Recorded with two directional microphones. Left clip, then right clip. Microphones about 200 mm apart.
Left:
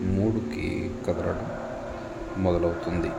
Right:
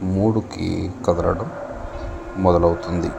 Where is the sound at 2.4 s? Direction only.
30° right (ahead or behind).